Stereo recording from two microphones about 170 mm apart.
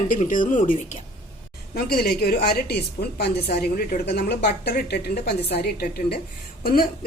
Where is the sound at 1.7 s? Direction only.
65° left (ahead or behind).